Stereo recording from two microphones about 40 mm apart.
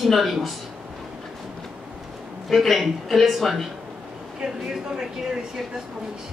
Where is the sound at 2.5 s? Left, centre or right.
Centre.